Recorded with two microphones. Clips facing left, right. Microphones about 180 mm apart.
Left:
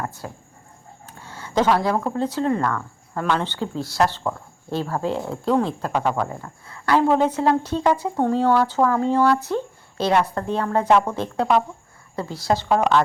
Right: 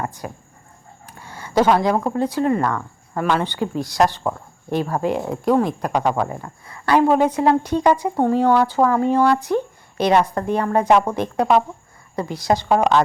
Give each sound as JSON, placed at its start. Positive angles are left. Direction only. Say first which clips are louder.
{"t": 0.2, "sound": "a woman's voice", "louder": "right 3 dB", "side_deg": -10}